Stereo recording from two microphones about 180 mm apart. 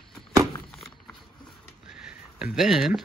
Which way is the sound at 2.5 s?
Centre (ahead or behind).